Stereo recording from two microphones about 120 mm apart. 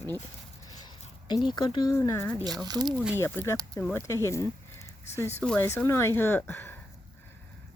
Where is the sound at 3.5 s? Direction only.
30° right (ahead or behind).